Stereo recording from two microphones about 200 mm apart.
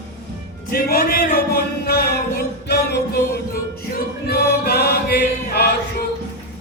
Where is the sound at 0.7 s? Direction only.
45° left (ahead or behind).